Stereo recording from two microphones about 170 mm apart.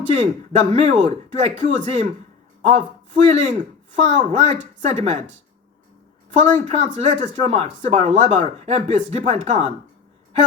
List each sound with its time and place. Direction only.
0.1 s speech: 35° right (ahead or behind)
3.2 s speech: 35° right (ahead or behind)
6.3 s speech: 40° right (ahead or behind)